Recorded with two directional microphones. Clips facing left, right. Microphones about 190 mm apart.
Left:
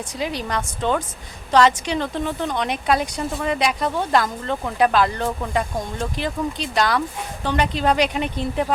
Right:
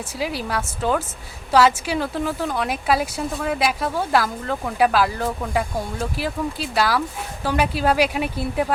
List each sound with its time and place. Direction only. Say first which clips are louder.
0.2 s speech: even; 5° right (ahead or behind)